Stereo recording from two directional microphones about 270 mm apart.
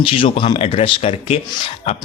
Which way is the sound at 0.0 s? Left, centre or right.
Centre.